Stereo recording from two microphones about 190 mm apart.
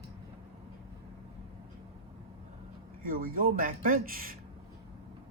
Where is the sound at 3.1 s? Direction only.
50° right (ahead or behind).